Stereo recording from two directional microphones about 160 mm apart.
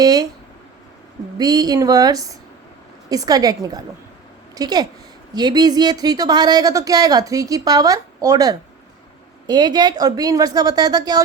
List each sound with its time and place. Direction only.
0.0 s a woman's voice: 25° right (ahead or behind)
1.4 s a woman's voice: 25° right (ahead or behind)